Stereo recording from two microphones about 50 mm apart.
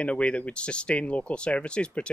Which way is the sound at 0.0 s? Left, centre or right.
Left.